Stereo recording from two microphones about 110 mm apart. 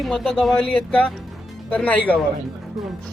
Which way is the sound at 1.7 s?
10° left (ahead or behind).